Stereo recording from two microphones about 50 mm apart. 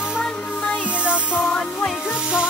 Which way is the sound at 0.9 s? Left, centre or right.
Right.